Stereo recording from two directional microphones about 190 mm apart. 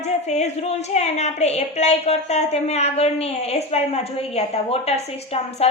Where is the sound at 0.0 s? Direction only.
35° left (ahead or behind).